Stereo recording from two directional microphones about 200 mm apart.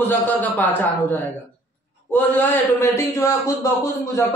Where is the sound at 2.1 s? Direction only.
10° left (ahead or behind).